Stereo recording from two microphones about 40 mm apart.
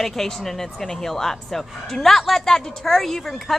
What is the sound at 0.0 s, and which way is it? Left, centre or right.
A woman's voice, centre.